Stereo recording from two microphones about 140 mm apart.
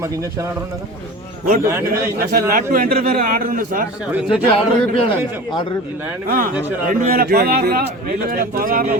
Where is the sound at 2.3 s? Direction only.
90° right.